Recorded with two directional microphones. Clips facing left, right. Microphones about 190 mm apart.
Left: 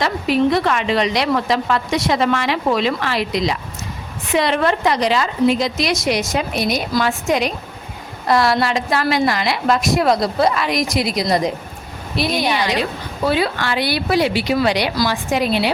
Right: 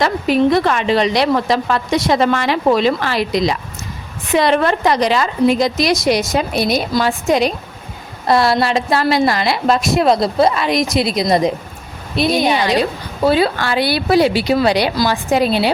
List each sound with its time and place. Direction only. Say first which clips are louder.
0.0 s a woman's voice: right 3 dB; 45° right (ahead or behind); by 11.5 s 25° right (ahead or behind)
13.2 s a woman's voice: right 4 dB; 30° right (ahead or behind)